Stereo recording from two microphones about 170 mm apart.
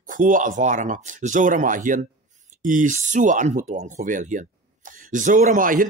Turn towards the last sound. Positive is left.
turn(degrees=-55)  # may be behind; listen again after turning